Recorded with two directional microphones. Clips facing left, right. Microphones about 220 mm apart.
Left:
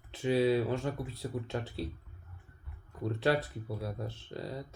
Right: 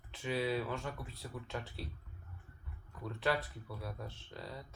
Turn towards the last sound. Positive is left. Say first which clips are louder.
# left 7 dB
turn(degrees=35)  # may be behind; listen again after turning